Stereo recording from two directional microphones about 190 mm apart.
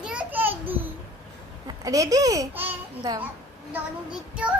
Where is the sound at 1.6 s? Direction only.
20° right (ahead or behind).